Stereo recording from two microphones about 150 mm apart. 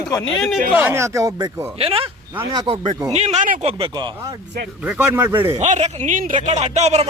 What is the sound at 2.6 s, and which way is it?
Speech, 35° right (ahead or behind).